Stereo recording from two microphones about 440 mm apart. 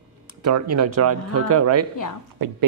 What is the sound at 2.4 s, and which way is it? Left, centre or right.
Speech, right.